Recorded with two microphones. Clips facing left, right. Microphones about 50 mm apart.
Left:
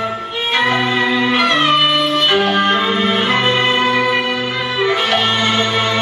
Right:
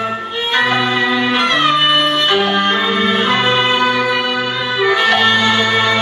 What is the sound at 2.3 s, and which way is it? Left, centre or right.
Music, left.